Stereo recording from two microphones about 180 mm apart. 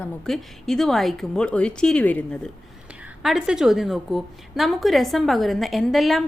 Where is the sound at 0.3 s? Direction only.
Centre (ahead or behind).